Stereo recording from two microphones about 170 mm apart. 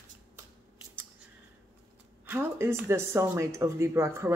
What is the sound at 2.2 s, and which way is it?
Speech, 15° right (ahead or behind).